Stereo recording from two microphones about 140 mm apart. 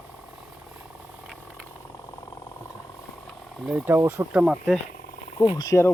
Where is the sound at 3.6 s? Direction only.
15° right (ahead or behind).